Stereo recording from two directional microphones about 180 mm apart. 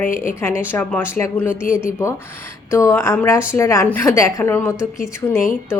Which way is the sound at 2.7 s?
15° left (ahead or behind).